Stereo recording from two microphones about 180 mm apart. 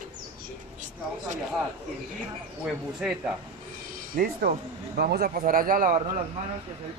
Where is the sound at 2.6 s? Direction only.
5° right (ahead or behind).